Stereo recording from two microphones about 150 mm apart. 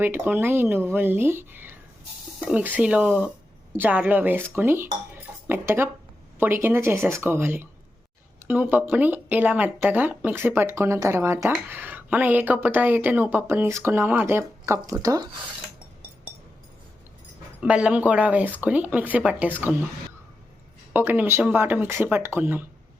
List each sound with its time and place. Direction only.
0.0 s speech: 15° right (ahead or behind)
17.6 s speech: 10° right (ahead or behind)
20.9 s speech: 15° right (ahead or behind)